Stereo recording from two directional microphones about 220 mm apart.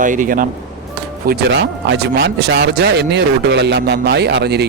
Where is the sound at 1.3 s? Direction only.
55° right (ahead or behind).